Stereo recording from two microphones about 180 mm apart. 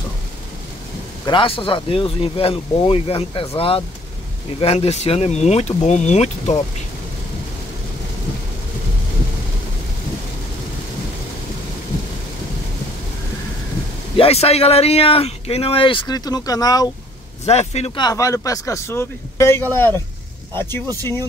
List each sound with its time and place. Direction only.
1.2 s speech: 30° left (ahead or behind)
14.1 s speech: 35° left (ahead or behind)
17.5 s speech: 35° left (ahead or behind); by 20.0 s 10° left (ahead or behind)